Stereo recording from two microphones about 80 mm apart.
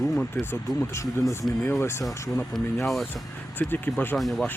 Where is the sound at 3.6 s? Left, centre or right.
Left.